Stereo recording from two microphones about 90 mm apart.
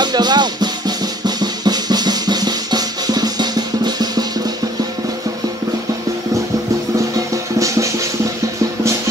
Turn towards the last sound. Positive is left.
turn(degrees=-35)  # may be behind; listen again after turning